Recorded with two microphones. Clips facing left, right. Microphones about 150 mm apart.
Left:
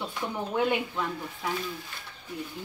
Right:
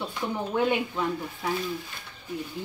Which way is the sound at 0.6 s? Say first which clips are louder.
Right 2 dB; 5° right (ahead or behind).